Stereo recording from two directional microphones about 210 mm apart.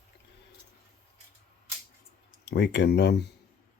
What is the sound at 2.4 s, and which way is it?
Speech, 55° left (ahead or behind).